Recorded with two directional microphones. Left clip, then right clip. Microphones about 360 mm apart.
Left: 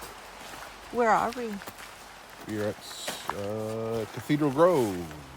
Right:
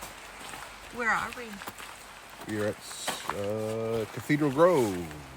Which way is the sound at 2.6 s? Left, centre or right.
Centre.